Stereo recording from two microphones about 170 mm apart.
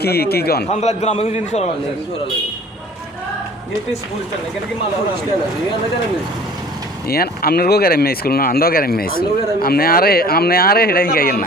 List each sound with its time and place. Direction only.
0.0 s a man's voice: 65° left (ahead or behind)
0.7 s a man's voice: 40° left (ahead or behind)
7.1 s speech: 65° left (ahead or behind)